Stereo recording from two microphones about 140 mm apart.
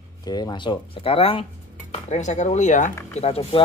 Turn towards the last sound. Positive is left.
turn(degrees=45)  # may be behind; listen again after turning